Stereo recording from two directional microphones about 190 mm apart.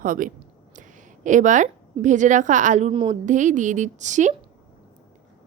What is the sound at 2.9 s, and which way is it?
Speech, 25° right (ahead or behind).